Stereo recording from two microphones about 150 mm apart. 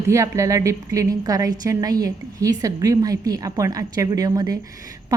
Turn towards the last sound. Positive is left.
turn(degrees=-25)  # may be behind; listen again after turning